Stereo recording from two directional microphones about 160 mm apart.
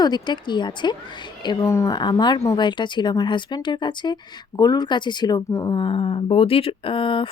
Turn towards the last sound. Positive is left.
turn(degrees=30)  # may be behind; listen again after turning